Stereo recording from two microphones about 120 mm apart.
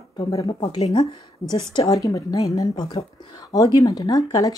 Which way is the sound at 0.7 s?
60° left (ahead or behind).